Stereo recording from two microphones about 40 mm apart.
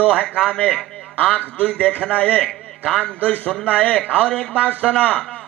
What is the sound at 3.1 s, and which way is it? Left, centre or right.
A man's voice, left.